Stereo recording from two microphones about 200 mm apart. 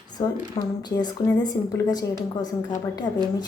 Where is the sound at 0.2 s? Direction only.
20° left (ahead or behind).